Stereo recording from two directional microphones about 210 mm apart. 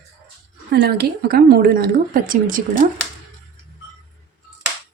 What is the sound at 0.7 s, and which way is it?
Speech, 50° right (ahead or behind).